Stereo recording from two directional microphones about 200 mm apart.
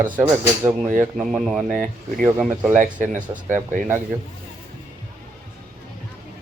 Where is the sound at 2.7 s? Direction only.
40° right (ahead or behind).